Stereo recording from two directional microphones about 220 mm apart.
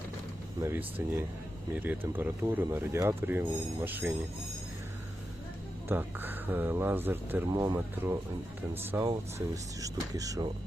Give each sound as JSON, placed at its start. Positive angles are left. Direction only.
{"t": 0.6, "sound": "speech", "side_deg": -10}
{"t": 5.9, "sound": "speech", "side_deg": -10}